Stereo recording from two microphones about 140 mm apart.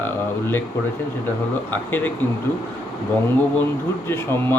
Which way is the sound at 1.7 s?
15° left (ahead or behind).